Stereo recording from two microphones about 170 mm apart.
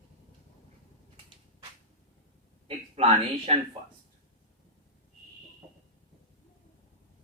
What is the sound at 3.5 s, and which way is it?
Speech, 40° right (ahead or behind).